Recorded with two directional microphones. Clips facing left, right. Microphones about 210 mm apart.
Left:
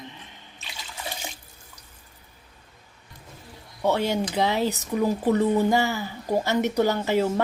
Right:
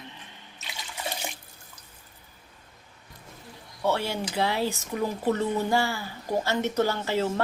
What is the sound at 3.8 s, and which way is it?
Speech, 20° left (ahead or behind).